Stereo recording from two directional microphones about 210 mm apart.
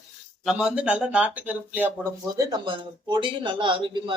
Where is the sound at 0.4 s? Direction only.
5° right (ahead or behind).